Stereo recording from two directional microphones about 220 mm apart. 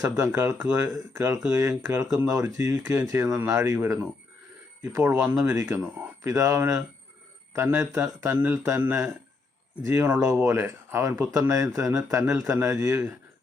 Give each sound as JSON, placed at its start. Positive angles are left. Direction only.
{"t": 0.0, "sound": "speech", "side_deg": -10}